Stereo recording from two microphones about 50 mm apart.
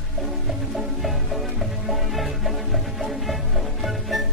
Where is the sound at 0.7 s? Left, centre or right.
Centre.